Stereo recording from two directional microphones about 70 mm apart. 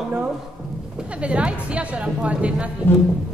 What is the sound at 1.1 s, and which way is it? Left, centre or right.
A woman's voice, centre.